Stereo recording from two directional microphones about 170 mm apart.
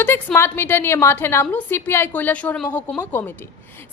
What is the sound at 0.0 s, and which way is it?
A woman's voice, 10° left (ahead or behind).